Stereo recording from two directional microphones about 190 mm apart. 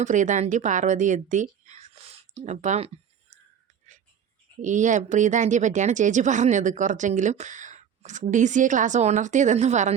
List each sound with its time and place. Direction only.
0.0 s speech: 40° right (ahead or behind)
4.6 s speech: 40° right (ahead or behind)